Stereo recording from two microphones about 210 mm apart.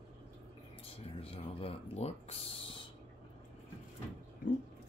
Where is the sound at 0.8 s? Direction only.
25° left (ahead or behind).